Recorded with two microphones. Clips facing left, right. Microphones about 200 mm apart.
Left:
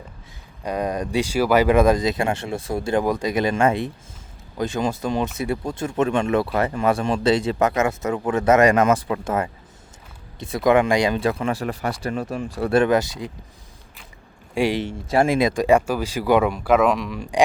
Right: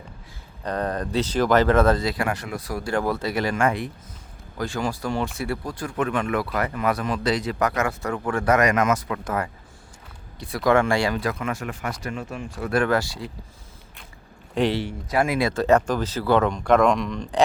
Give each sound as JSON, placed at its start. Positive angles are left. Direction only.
{"t": 0.6, "sound": "speech", "side_deg": 10}
{"t": 12.8, "sound": "speech", "side_deg": 20}
{"t": 14.5, "sound": "speech", "side_deg": 10}
{"t": 14.8, "sound": "speech", "side_deg": 25}